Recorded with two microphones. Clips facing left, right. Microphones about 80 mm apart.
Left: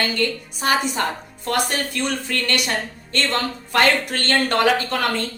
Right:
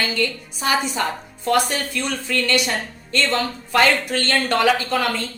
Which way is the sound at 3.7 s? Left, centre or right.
Left.